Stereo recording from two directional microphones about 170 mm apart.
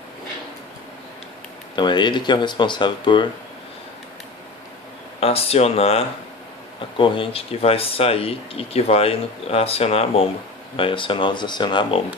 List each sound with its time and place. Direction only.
1.8 s speech: 25° left (ahead or behind)
5.2 s speech: 35° left (ahead or behind)